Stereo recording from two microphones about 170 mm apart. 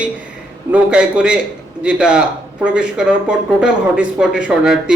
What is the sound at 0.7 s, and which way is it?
Speech, 5° right (ahead or behind).